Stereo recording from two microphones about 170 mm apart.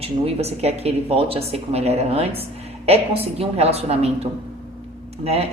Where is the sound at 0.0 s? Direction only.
35° right (ahead or behind).